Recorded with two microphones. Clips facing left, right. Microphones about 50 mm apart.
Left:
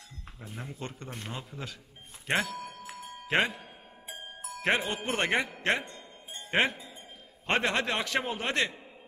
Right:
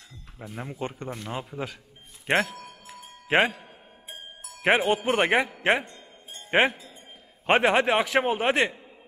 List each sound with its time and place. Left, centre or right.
0.4 s a man's voice: centre
2.2 s speech: right
3.3 s speech: centre
4.6 s a man's voice: centre